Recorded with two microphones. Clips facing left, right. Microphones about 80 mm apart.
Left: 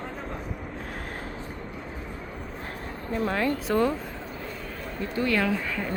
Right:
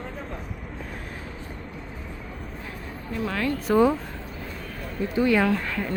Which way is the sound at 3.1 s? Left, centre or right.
Left.